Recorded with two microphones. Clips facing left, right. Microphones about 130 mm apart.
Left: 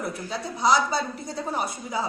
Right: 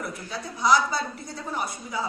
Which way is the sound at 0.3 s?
25° left (ahead or behind).